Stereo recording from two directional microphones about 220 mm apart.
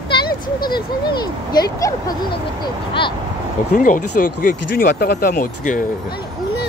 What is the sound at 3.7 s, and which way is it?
Speech, 35° left (ahead or behind).